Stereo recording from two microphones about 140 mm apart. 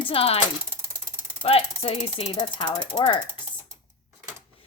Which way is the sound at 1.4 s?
45° left (ahead or behind).